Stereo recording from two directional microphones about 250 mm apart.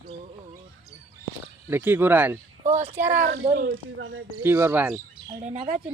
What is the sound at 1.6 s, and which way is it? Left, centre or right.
Speech, centre.